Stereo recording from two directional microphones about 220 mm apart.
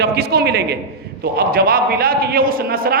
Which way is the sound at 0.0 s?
45° right (ahead or behind).